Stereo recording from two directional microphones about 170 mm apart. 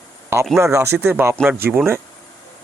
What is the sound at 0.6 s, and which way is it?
Speech, 15° right (ahead or behind).